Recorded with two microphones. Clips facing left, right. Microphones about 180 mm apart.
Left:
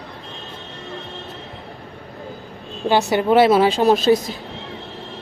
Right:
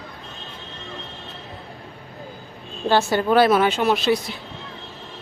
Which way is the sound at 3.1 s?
25° left (ahead or behind).